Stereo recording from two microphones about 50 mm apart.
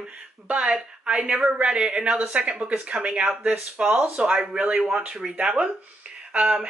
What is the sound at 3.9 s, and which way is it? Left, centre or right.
Speech, right.